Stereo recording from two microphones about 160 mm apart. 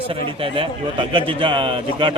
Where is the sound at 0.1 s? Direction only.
35° right (ahead or behind).